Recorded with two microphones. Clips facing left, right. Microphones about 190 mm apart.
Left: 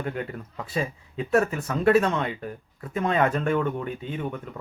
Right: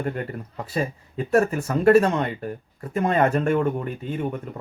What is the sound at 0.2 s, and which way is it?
Speech, 40° right (ahead or behind).